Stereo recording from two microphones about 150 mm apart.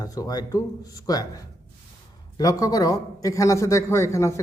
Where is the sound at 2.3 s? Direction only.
25° left (ahead or behind).